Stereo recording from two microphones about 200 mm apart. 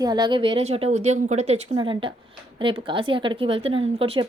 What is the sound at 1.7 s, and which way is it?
Speech, 25° right (ahead or behind).